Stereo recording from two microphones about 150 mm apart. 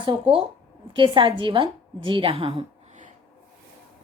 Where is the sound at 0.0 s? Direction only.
35° right (ahead or behind).